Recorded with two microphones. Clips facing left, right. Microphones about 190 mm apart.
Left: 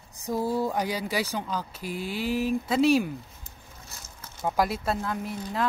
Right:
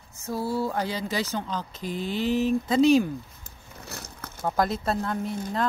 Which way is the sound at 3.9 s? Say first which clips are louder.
Right 10 dB; 65° right (ahead or behind).